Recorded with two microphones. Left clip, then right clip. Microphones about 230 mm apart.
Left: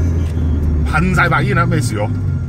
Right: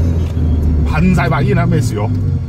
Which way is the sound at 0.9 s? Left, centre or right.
Left.